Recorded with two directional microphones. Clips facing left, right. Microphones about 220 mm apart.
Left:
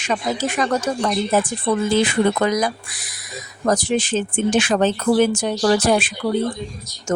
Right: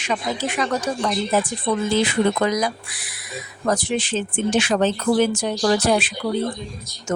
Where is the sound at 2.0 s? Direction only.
50° left (ahead or behind).